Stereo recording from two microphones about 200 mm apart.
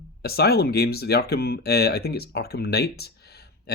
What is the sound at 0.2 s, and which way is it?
Speech, 50° left (ahead or behind).